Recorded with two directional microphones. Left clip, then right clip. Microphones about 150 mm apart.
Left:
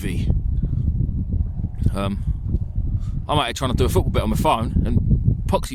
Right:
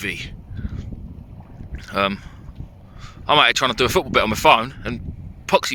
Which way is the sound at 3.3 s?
25° left (ahead or behind).